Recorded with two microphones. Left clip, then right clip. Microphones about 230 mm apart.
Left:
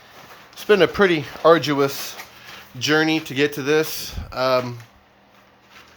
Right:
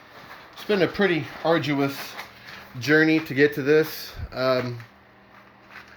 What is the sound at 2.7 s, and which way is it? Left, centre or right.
Speech, centre.